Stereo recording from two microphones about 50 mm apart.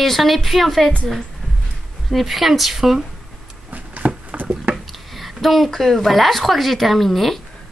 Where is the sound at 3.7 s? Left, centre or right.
Right.